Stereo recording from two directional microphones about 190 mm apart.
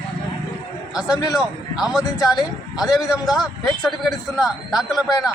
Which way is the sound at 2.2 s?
20° left (ahead or behind).